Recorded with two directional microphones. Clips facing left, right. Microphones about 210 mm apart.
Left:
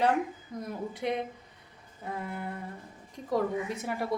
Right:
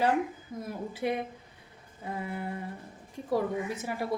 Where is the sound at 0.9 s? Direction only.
5° right (ahead or behind).